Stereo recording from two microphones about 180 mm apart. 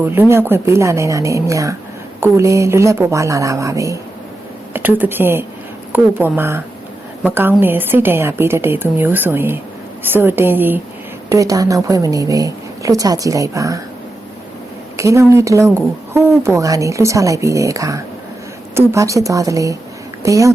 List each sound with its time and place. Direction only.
0.0 s a woman's voice: 10° right (ahead or behind)
14.9 s a woman's voice: 15° right (ahead or behind)